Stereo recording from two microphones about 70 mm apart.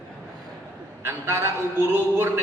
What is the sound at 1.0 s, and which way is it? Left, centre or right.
A man's voice, right.